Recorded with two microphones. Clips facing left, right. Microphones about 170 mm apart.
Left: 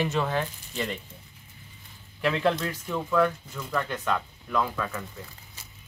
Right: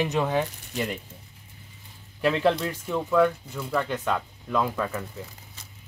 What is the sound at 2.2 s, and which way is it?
Speech, 15° right (ahead or behind).